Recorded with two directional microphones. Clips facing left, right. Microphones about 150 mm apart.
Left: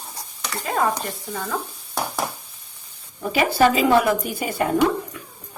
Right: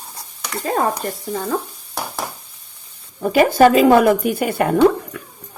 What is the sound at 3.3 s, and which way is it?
Speech, 50° right (ahead or behind).